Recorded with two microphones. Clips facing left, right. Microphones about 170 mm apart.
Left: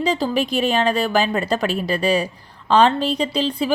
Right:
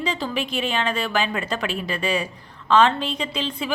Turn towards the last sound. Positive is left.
turn(degrees=35)  # may be behind; listen again after turning